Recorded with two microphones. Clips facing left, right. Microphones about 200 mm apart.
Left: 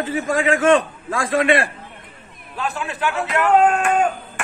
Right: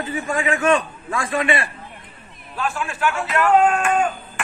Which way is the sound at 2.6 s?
20° left (ahead or behind).